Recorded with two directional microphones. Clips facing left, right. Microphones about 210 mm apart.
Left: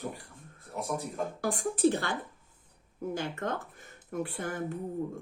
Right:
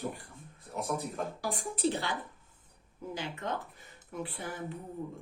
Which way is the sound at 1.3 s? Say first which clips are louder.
Left 6 dB; 50° left (ahead or behind).